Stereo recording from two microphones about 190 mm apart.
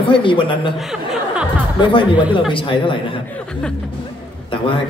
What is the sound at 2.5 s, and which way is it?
Speech, 25° left (ahead or behind).